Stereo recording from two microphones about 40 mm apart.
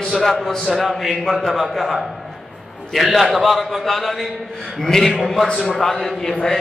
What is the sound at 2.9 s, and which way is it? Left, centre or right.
A man's voice, centre.